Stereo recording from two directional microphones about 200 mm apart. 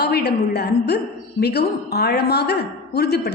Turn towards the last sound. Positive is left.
turn(degrees=55)  # may be behind; listen again after turning